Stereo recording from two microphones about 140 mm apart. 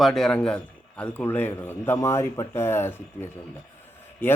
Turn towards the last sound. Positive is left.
turn(degrees=15)  # may be behind; listen again after turning